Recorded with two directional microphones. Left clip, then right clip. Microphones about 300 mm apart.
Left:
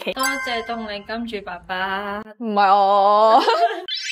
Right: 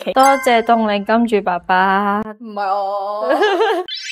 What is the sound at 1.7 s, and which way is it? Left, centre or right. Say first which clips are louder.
Speech: right 9 dB; right.